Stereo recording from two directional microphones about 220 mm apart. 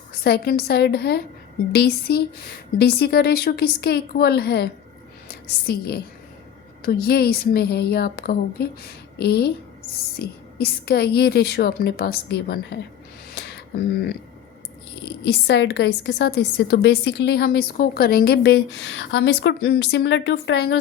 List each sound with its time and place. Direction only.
0.1 s a woman's voice: 45° left (ahead or behind)
13.3 s a sound: 45° left (ahead or behind)
15.2 s a woman's voice: 50° left (ahead or behind)